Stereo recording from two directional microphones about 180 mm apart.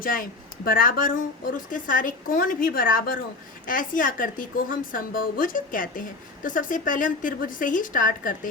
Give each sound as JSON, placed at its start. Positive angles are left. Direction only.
{"t": 0.0, "sound": "a woman's voice", "side_deg": 50}